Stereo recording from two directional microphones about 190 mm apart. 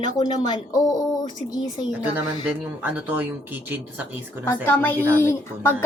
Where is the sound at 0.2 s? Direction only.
20° left (ahead or behind).